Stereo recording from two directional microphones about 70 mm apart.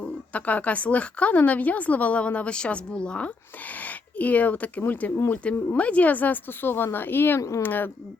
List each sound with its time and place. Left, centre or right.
0.3 s speech: left
3.8 s a sound: left
4.9 s speech: left